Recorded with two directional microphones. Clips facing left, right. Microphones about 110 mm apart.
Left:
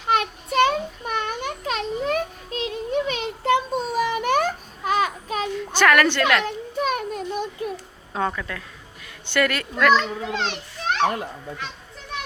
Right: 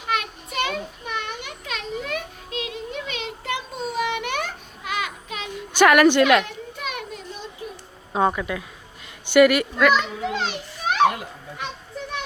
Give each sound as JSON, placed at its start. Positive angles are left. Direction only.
{"t": 0.1, "sound": "a sound", "side_deg": 35}
{"t": 5.5, "sound": "a woman's voice", "side_deg": -15}
{"t": 6.4, "sound": "children playing", "side_deg": 40}
{"t": 8.1, "sound": "a woman's voice", "side_deg": -15}